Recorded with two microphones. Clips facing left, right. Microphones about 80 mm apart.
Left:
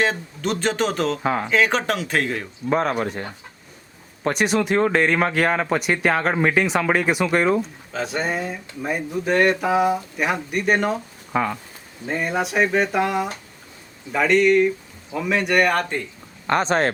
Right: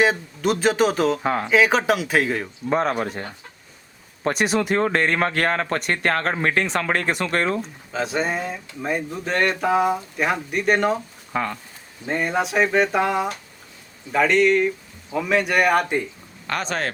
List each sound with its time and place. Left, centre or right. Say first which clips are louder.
0.0 s speech: right 3 dB; centre
16.5 s speech: left 6 dB; left